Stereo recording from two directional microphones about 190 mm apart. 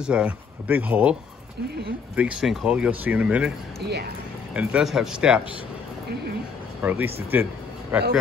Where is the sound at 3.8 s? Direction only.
60° right (ahead or behind).